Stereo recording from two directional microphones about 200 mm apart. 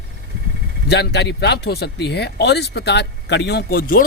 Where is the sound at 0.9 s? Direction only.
55° left (ahead or behind).